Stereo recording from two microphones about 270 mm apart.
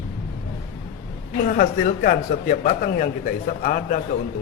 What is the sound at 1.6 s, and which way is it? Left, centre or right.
A man's voice, left.